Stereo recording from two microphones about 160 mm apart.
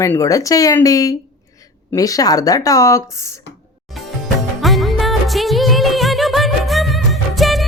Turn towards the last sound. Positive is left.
turn(degrees=0)  # may be behind; listen again after turning